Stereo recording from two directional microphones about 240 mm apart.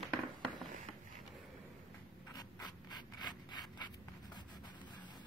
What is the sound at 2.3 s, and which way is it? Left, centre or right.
Rub, centre.